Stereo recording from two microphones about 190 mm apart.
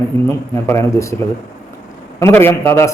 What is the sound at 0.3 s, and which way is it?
Speech, 15° left (ahead or behind).